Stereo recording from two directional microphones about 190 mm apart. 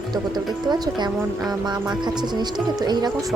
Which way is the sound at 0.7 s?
20° right (ahead or behind).